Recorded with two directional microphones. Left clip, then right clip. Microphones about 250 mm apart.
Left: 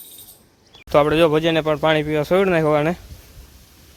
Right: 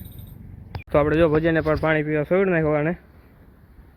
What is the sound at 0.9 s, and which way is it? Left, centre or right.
Speech, centre.